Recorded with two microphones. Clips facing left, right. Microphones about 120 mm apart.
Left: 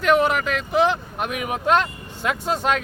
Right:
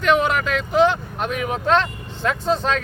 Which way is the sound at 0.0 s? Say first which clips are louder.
Even; 5° left (ahead or behind).